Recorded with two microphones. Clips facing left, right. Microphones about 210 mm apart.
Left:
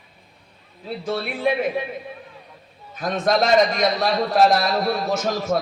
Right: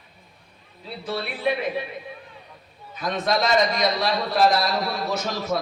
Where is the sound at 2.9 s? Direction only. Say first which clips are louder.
Left 3 dB; 50° left (ahead or behind).